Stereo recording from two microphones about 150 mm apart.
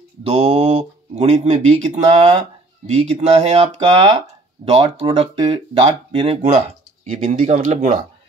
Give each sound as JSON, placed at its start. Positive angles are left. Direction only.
{"t": 0.2, "sound": "speech", "side_deg": -40}